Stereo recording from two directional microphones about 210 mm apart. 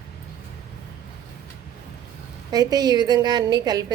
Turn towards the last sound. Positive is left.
turn(degrees=-20)  # may be behind; listen again after turning